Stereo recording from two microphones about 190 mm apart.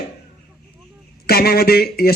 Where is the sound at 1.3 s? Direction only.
55° left (ahead or behind).